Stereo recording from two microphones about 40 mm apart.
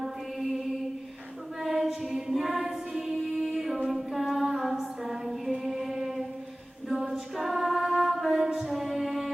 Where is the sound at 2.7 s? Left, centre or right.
Centre.